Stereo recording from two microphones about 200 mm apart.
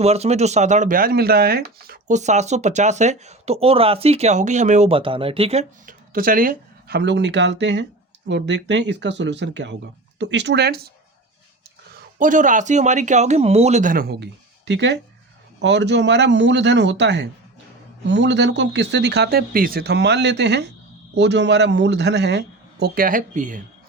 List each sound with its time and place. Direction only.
0.0 s speech: 30° right (ahead or behind); by 10.8 s 55° right (ahead or behind)
11.9 s speech: 40° right (ahead or behind)